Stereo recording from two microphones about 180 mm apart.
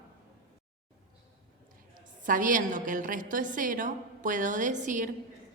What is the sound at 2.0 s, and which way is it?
A woman's voice, 45° right (ahead or behind).